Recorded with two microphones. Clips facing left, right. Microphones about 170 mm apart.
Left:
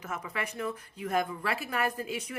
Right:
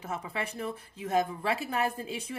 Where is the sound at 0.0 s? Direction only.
30° right (ahead or behind).